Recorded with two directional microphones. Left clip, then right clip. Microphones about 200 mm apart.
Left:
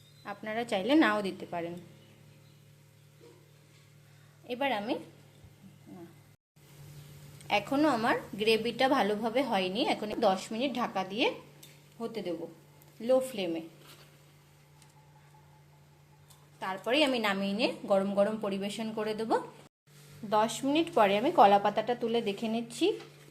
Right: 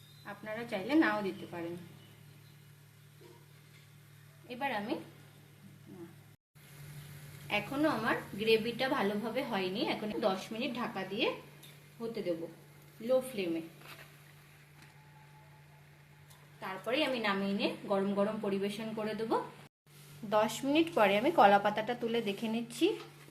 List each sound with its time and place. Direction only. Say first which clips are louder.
0.3 s a woman's voice: left 6 dB; 35° left (ahead or behind)
4.4 s a woman's voice: left 5 dB; 35° left (ahead or behind)
7.4 s a woman's voice: left 5 dB; 35° left (ahead or behind)
16.6 s a woman's voice: left 5 dB; 45° left (ahead or behind)
20.3 s a woman's voice: left 2 dB; 15° left (ahead or behind)